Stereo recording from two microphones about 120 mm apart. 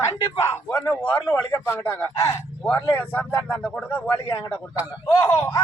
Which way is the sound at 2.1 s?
25° left (ahead or behind).